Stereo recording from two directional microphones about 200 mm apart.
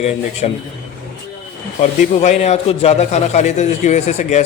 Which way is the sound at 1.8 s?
35° left (ahead or behind).